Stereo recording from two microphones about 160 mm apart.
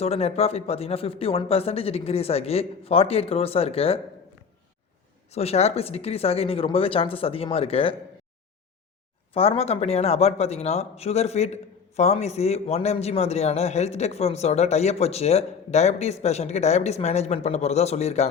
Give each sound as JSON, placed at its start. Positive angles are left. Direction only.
{"t": 0.0, "sound": "speech", "side_deg": 40}
{"t": 5.3, "sound": "speech", "side_deg": 40}
{"t": 9.3, "sound": "a man's voice", "side_deg": 35}